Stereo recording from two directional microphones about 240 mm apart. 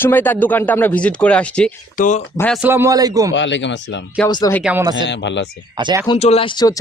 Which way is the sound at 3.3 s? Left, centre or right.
Left.